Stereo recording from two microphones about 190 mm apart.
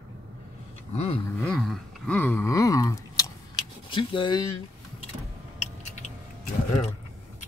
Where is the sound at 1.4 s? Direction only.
5° left (ahead or behind); by 4.4 s 25° left (ahead or behind).